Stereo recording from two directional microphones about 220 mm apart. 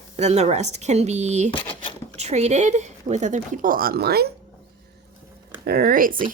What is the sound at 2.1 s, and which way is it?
Speech, 30° right (ahead or behind).